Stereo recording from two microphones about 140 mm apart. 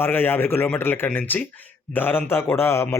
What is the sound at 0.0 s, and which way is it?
A man's voice, 15° left (ahead or behind).